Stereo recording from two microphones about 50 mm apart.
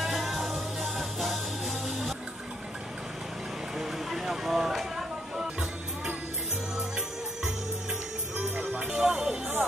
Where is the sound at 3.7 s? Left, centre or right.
Centre.